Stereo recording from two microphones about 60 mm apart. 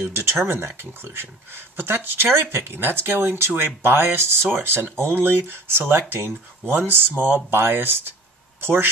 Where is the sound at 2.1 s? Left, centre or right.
Right.